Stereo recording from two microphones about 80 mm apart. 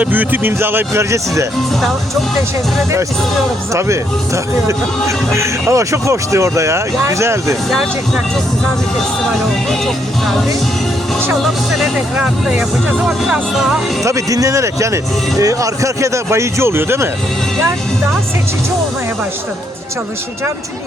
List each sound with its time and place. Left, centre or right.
0.0 s a man's voice: right
3.7 s speech: right
7.7 s speech: centre
9.6 s speech: centre
12.1 s speech: centre
14.0 s speech: right